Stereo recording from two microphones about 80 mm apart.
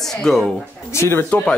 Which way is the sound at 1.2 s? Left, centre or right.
Centre.